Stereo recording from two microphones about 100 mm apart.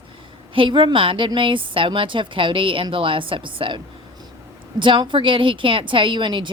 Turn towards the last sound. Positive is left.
turn(degrees=-55)  # may be behind; listen again after turning